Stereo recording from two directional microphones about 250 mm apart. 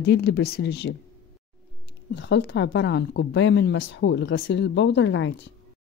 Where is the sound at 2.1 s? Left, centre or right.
Left.